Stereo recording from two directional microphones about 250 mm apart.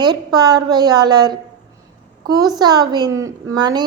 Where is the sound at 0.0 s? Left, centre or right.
Centre.